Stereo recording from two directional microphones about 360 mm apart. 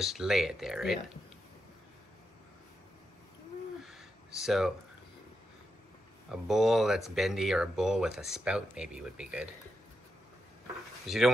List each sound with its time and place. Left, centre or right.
0.0 s speech: centre
3.8 s a sound: centre
6.3 s speech: centre
11.1 s speech: centre